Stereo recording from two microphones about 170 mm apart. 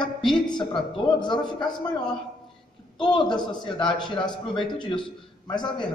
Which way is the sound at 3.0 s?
5° left (ahead or behind).